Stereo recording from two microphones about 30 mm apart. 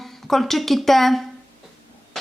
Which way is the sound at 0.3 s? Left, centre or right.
Centre.